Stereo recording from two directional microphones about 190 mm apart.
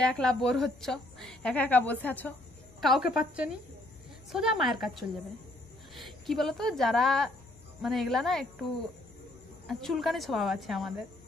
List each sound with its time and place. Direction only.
0.0 s a woman's voice: centre (ahead or behind)
2.8 s a woman's voice: centre (ahead or behind)
9.7 s a woman's voice: centre (ahead or behind)